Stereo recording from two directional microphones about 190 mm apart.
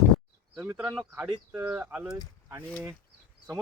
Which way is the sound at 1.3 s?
20° right (ahead or behind).